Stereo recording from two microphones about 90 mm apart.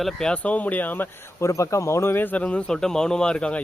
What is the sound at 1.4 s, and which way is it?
A man's voice, 35° left (ahead or behind).